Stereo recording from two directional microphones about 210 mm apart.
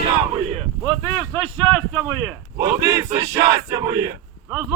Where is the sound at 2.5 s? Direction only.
20° right (ahead or behind).